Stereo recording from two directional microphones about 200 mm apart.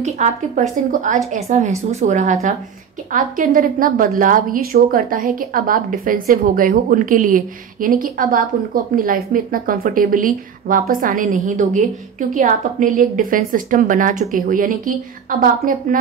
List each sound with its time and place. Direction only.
0.0 s a woman's voice: 35° right (ahead or behind)